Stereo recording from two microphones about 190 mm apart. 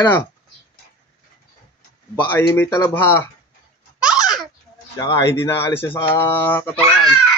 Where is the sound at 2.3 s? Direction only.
10° left (ahead or behind).